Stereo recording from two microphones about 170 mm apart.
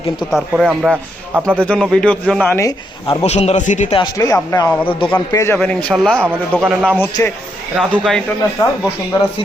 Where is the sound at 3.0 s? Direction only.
35° left (ahead or behind).